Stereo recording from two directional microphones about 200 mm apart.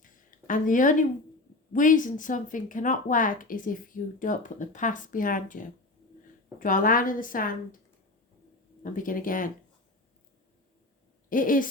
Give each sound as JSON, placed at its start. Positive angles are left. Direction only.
{"t": 0.0, "sound": "a sound", "side_deg": 40}
{"t": 1.7, "sound": "speech", "side_deg": 40}
{"t": 8.8, "sound": "speech", "side_deg": 40}
{"t": 11.3, "sound": "speech", "side_deg": 45}